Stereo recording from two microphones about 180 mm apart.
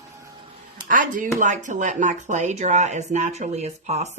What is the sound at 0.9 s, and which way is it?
Speech, 45° right (ahead or behind).